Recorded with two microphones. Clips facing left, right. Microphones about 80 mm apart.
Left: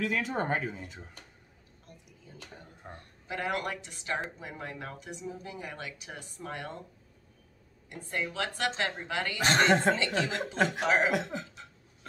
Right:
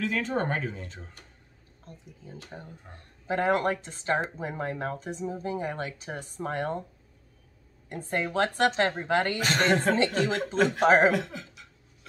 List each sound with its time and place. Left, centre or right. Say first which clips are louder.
0.0 s speech: right 2 dB; centre
1.9 s speech: right 7 dB; right
2.9 s speech: left 4 dB; left
3.3 s speech: right 8 dB; right
7.9 s speech: right 6 dB; right
9.4 s speech: even; left
9.9 s speech: right 5 dB; right
11.1 s a sound: right 1 dB; left